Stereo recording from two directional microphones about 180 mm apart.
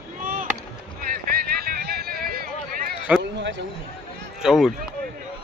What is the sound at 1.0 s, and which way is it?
Run, 55° right (ahead or behind).